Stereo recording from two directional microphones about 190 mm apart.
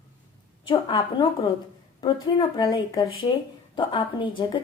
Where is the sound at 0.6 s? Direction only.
25° left (ahead or behind).